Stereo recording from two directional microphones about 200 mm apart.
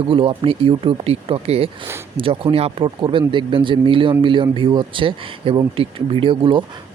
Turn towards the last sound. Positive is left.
turn(degrees=-25)  # may be behind; listen again after turning